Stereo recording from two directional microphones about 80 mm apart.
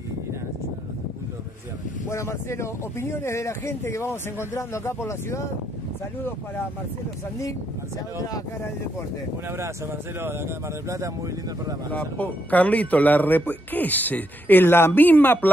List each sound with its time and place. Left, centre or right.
2.0 s speech: left
10.2 s speech: right
11.9 s speech: centre